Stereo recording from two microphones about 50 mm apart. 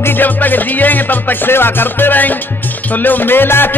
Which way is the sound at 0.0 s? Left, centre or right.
Left.